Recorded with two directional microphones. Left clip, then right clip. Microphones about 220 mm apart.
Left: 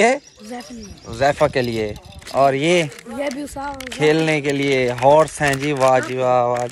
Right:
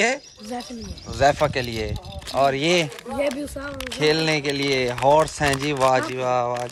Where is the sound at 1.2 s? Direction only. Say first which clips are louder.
Left 3 dB; 10° right (ahead or behind).